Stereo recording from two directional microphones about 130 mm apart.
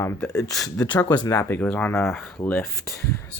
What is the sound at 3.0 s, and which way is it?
Speech, 20° left (ahead or behind).